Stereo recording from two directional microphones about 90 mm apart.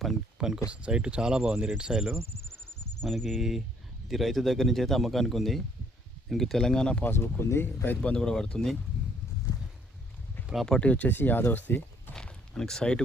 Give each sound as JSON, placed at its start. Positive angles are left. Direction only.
{"t": 0.3, "sound": "speech", "side_deg": -10}
{"t": 3.0, "sound": "a man's voice", "side_deg": 0}
{"t": 7.0, "sound": "speech", "side_deg": 25}
{"t": 8.0, "sound": "speech", "side_deg": 10}
{"t": 10.4, "sound": "a sound", "side_deg": -5}
{"t": 10.7, "sound": "speech", "side_deg": 15}
{"t": 12.1, "sound": "a sound", "side_deg": 5}